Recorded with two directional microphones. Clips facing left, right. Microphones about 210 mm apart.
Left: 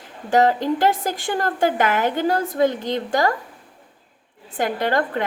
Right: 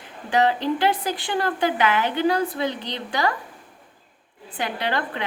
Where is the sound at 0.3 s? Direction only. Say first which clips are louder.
Left 3 dB; 45° left (ahead or behind).